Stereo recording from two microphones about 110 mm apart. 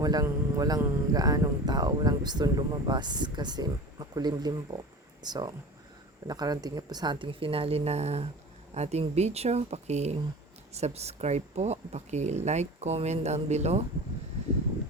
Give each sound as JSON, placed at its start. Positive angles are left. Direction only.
{"t": 0.0, "sound": "speech", "side_deg": -35}
{"t": 10.8, "sound": "speech", "side_deg": -75}